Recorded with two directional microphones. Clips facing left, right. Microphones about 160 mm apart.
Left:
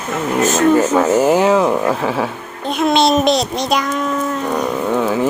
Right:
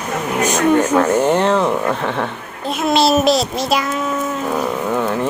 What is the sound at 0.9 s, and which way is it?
Speech, 10° left (ahead or behind).